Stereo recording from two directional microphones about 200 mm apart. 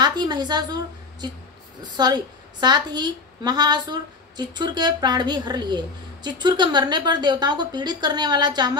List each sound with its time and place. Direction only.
0.0 s a woman's voice: 20° right (ahead or behind)
1.8 s a woman's voice: 20° right (ahead or behind)